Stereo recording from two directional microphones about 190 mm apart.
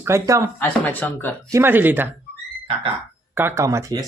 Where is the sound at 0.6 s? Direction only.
10° left (ahead or behind).